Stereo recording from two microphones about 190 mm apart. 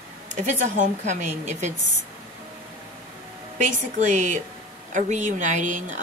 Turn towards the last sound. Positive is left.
turn(degrees=-40)  # may be behind; listen again after turning